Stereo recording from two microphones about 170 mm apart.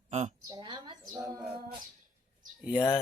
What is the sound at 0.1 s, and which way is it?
Speech, 40° right (ahead or behind).